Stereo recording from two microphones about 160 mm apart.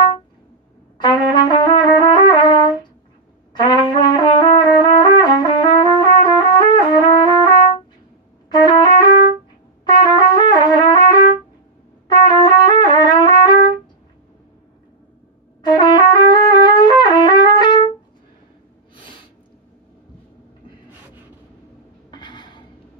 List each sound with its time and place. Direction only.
1.0 s trumpet: 30° left (ahead or behind)
8.5 s trumpet: 25° left (ahead or behind)
15.6 s trumpet: 25° left (ahead or behind)
22.1 s a sound: 30° left (ahead or behind)